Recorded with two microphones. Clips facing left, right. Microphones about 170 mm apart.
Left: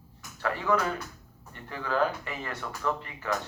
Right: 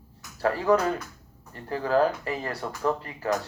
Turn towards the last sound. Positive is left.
turn(degrees=-35)  # may be behind; listen again after turning